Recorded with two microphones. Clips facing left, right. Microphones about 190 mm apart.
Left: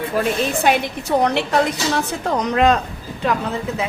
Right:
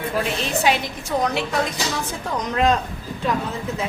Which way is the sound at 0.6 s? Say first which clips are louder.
Left 3 dB; 60° left (ahead or behind).